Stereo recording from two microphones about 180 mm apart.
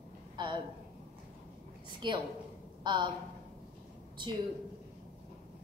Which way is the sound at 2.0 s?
25° right (ahead or behind).